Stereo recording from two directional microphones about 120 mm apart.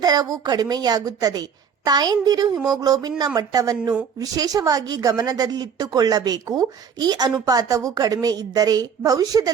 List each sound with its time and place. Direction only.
0.0 s a woman's voice: 30° right (ahead or behind)